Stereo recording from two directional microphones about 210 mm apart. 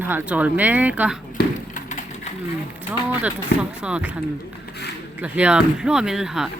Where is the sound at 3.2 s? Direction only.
5° right (ahead or behind).